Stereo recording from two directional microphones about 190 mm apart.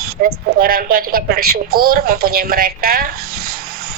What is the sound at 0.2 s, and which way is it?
Speech, 50° right (ahead or behind).